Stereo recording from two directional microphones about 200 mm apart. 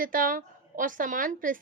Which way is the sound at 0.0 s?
45° right (ahead or behind).